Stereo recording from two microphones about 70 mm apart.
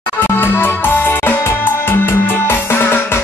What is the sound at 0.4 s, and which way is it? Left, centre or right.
Music, left.